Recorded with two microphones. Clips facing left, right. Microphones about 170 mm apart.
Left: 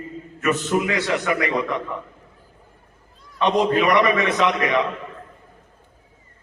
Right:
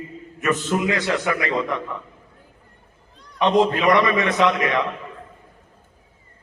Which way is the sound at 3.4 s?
20° right (ahead or behind).